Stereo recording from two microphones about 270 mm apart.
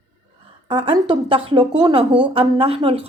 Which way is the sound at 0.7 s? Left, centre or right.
Centre.